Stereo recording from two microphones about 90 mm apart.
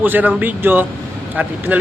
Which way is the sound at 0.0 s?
20° right (ahead or behind).